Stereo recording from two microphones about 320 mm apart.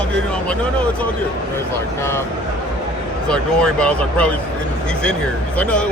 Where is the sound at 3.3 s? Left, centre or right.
Centre.